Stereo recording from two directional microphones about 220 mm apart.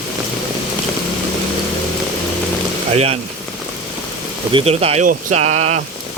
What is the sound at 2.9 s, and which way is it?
Speech, 30° right (ahead or behind).